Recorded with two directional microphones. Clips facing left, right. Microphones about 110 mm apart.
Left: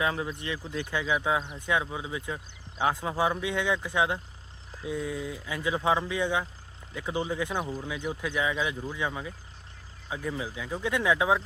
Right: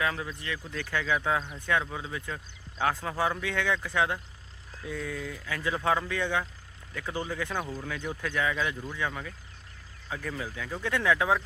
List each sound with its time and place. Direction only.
0.0 s speech: 25° left (ahead or behind)